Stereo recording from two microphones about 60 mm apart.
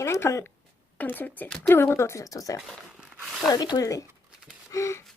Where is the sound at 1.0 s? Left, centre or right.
Left.